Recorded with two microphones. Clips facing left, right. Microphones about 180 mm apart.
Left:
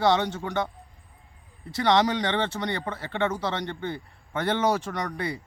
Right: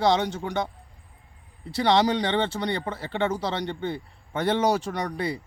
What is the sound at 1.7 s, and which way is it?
Speech, 30° right (ahead or behind).